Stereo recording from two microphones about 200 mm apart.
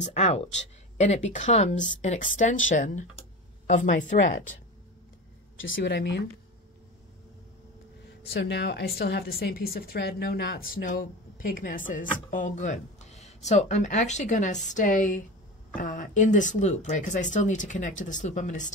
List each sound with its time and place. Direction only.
0.0 s speech: 35° left (ahead or behind)
5.7 s speech: 55° left (ahead or behind)
8.0 s speech: 55° left (ahead or behind); by 18.7 s 40° left (ahead or behind)